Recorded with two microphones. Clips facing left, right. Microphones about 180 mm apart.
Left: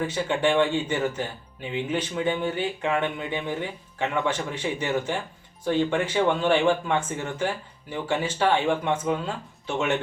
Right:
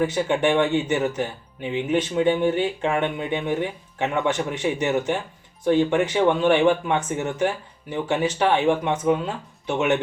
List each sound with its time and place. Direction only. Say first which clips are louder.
0.0 s speech: right 3 dB; 20° right (ahead or behind)